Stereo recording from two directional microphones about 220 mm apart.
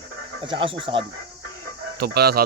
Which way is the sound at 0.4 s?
25° right (ahead or behind).